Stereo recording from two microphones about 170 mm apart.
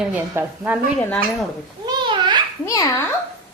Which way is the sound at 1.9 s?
25° right (ahead or behind).